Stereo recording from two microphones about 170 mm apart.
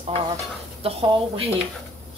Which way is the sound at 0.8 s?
35° right (ahead or behind).